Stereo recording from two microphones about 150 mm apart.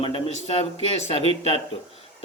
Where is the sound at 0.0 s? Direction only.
40° left (ahead or behind).